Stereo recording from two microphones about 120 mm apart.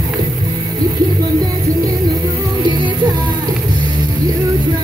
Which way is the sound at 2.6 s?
40° right (ahead or behind).